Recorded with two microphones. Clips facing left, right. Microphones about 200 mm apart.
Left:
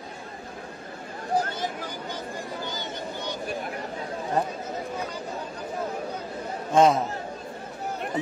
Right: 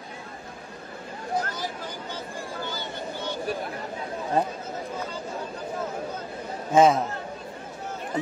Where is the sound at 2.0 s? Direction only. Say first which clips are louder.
Left 1 dB; 15° left (ahead or behind).